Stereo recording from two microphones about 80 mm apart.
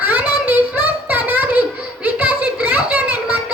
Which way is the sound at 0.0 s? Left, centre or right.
Right.